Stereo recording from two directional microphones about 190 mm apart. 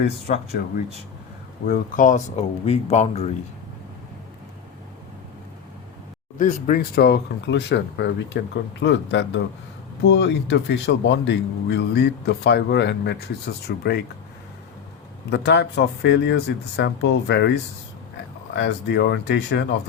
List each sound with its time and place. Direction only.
0.0 s speech: 60° left (ahead or behind)
1.6 s speech: 45° left (ahead or behind)
6.4 s speech: 50° left (ahead or behind)
15.3 s speech: 65° left (ahead or behind)